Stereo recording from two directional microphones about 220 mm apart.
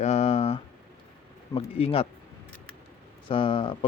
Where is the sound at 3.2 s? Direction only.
25° left (ahead or behind).